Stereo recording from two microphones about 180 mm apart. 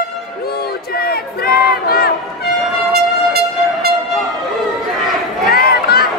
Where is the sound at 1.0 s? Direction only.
60° left (ahead or behind).